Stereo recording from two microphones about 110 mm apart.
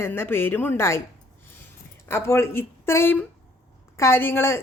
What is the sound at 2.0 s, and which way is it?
Speech, 25° left (ahead or behind).